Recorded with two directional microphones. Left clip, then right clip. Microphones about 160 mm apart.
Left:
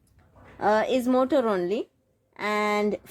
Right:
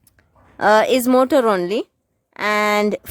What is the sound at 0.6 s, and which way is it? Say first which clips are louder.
A woman's voice: right 9 dB; 50° right (ahead or behind).